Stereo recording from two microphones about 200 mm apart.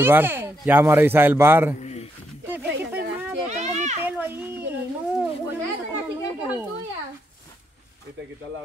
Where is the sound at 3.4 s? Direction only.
35° right (ahead or behind).